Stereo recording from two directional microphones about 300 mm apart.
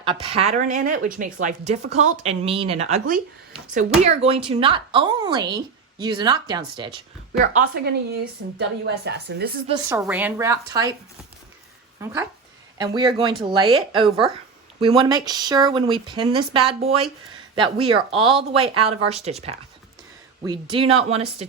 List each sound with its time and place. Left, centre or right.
0.0 s a woman's voice: centre
7.3 s a woman's voice: right
9.6 s a woman's voice: centre
11.9 s a woman's voice: centre